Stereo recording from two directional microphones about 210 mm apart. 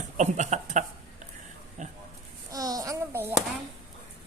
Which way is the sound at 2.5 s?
15° right (ahead or behind).